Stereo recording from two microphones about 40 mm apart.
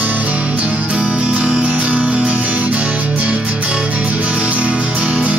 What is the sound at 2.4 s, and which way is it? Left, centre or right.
Music, right.